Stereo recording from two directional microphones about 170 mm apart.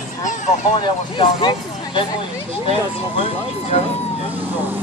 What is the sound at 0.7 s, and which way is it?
Speech, 30° left (ahead or behind).